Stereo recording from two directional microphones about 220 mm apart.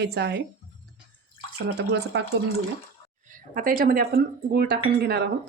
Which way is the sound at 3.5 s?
40° right (ahead or behind).